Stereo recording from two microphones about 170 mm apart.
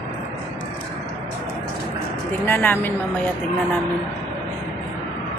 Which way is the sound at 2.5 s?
10° left (ahead or behind).